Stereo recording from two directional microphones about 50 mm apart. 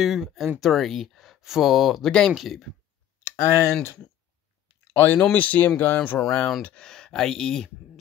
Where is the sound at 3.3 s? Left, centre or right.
Left.